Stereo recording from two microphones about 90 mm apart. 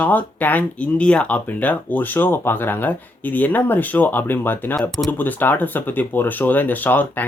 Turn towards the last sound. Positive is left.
turn(degrees=20)  # may be behind; listen again after turning